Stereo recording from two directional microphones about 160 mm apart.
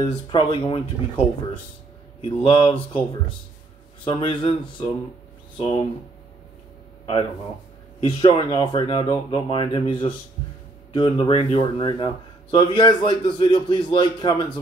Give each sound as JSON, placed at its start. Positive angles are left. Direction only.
{"t": 0.3, "sound": "speech", "side_deg": 30}
{"t": 2.2, "sound": "speech", "side_deg": 35}
{"t": 8.0, "sound": "speech", "side_deg": 30}